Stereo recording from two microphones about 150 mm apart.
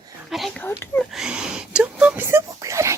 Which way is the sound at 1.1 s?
5° right (ahead or behind).